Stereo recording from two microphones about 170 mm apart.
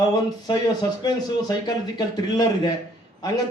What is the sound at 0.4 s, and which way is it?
Speech, 25° left (ahead or behind).